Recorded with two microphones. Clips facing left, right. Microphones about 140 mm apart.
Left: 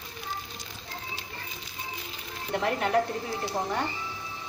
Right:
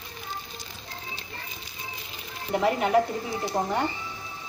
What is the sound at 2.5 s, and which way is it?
Speech, 5° right (ahead or behind).